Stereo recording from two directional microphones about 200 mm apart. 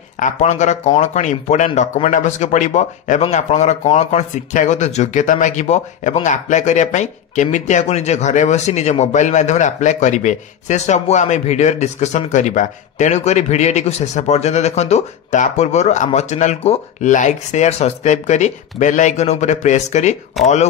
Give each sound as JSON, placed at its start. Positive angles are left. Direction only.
{"t": 0.2, "sound": "speech", "side_deg": 35}